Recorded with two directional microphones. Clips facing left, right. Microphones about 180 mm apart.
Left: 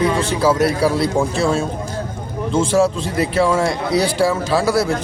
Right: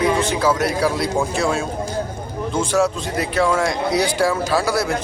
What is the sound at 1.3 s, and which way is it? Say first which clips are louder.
A man's voice: left 2 dB; 30° left (ahead or behind).